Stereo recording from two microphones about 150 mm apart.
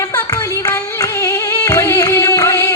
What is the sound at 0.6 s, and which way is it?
Music, 25° left (ahead or behind).